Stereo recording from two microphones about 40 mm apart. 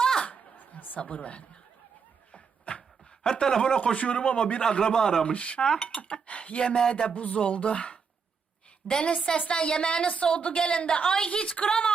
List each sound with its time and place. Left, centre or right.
0.0 s a sound: centre
0.3 s a sound: left
2.3 s dog: left
3.4 s speech: centre
3.9 s speech: left; by 5.2 s centre
5.2 s speech: left
5.6 s a woman's voice: centre
6.0 s a woman's voice: left